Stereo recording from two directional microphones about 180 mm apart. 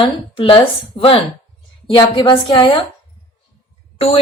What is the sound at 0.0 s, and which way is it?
A woman's voice, 30° left (ahead or behind).